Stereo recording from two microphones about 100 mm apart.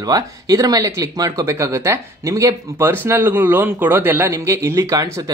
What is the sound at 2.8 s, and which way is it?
A man's voice, 20° right (ahead or behind).